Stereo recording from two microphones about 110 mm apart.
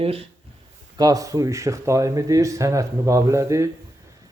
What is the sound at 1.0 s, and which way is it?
A man's voice, 30° right (ahead or behind).